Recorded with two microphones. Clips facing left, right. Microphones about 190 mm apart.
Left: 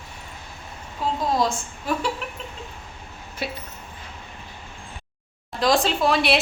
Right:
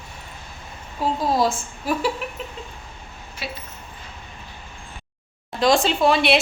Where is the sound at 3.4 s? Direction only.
50° left (ahead or behind).